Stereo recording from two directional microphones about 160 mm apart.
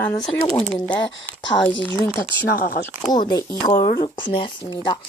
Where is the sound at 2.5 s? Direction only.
65° left (ahead or behind).